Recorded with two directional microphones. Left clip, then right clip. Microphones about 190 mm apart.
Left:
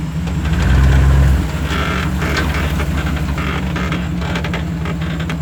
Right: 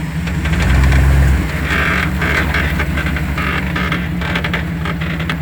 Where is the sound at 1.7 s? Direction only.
45° right (ahead or behind).